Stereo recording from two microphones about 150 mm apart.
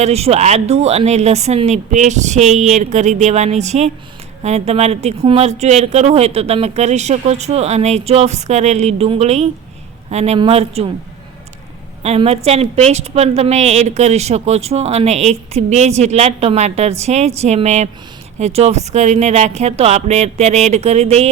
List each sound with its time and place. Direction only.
0.0 s a woman's voice: 45° right (ahead or behind)
12.0 s a woman's voice: 45° right (ahead or behind)